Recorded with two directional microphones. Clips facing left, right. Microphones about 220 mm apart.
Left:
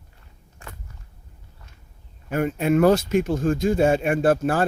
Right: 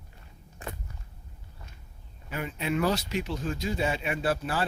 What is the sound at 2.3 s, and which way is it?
Speech, 50° left (ahead or behind).